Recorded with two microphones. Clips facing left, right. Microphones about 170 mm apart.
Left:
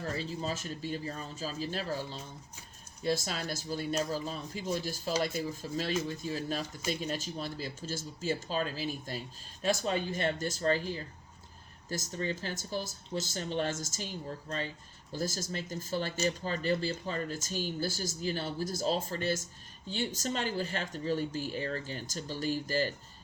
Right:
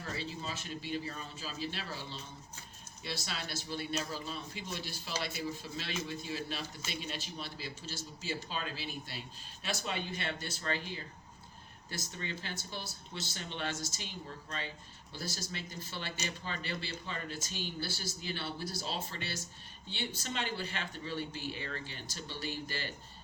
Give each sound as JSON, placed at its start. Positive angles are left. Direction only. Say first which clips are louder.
{"t": 0.1, "sound": "speech", "louder": "left 3 dB", "side_deg": 45}